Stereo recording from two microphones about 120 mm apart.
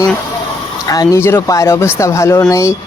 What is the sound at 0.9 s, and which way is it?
Speech, 30° left (ahead or behind).